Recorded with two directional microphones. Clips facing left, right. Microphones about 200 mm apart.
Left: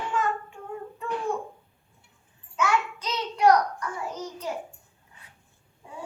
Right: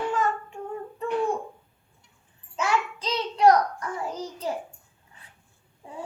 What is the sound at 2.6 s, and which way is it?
Child singing, 30° right (ahead or behind).